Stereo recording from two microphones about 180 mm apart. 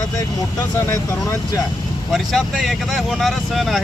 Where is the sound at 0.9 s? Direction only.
15° left (ahead or behind).